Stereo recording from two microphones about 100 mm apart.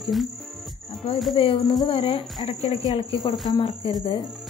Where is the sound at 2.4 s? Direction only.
90° left; by 3.9 s 55° left (ahead or behind).